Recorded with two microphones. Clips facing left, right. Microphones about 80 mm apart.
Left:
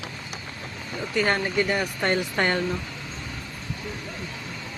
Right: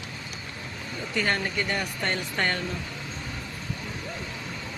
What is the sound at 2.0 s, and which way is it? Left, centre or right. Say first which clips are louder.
Speech: left 5 dB; centre.